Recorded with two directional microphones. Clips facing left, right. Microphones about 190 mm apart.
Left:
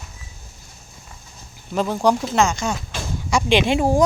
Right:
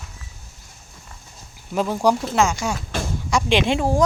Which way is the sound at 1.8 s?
5° right (ahead or behind).